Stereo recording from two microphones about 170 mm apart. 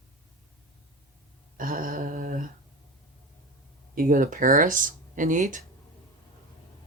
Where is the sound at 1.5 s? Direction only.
55° right (ahead or behind).